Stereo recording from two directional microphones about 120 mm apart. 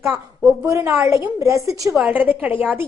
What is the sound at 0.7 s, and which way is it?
A woman's voice, 25° right (ahead or behind).